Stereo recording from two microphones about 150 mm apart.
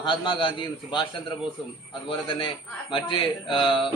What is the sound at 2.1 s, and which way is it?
A man's voice, 35° left (ahead or behind).